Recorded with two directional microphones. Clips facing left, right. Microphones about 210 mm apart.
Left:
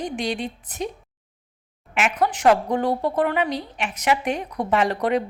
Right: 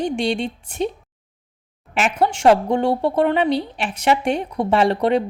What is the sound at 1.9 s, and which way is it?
A woman's voice, 30° right (ahead or behind).